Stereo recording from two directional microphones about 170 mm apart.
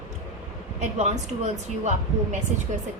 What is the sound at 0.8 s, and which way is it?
Speech, 40° right (ahead or behind).